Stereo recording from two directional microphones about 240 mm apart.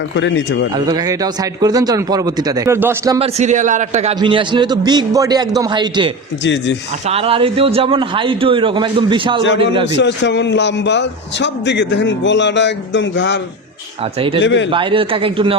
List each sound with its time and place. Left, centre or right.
0.2 s a man's voice: left
0.9 s a man's voice: centre
3.2 s a man's voice: right
6.4 s a man's voice: left
7.1 s a man's voice: right
9.4 s a man's voice: left
14.4 s a man's voice: left
14.7 s a man's voice: right